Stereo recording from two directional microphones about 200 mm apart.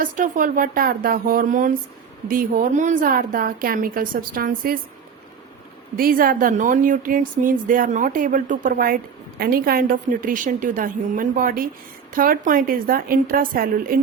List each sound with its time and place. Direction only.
0.0 s a woman's voice: 40° right (ahead or behind)
6.0 s a woman's voice: 45° right (ahead or behind)